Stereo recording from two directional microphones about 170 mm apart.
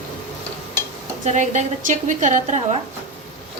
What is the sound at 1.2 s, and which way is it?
A woman's voice, 45° right (ahead or behind).